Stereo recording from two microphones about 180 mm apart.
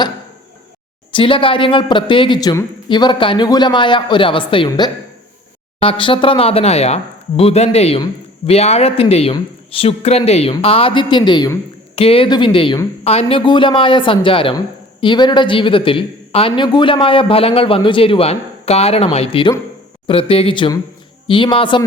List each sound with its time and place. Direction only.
1.1 s a man's voice: 30° left (ahead or behind)